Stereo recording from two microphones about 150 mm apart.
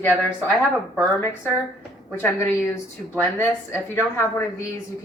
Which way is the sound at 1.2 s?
15° left (ahead or behind).